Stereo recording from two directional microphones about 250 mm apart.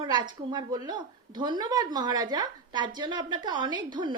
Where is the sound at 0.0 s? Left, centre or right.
Centre.